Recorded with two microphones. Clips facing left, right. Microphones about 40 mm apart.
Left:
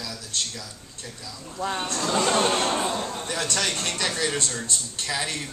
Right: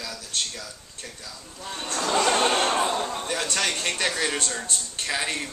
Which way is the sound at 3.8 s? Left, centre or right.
Right.